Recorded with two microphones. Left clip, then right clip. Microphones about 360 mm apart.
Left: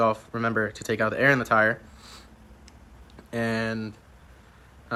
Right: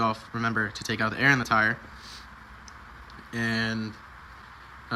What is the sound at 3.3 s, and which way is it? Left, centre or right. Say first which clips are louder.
Speech: left 1 dB; centre.